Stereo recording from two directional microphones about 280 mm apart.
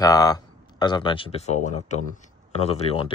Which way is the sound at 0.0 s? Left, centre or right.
Centre.